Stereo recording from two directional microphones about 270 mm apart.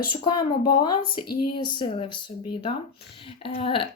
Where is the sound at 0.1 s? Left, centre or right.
Centre.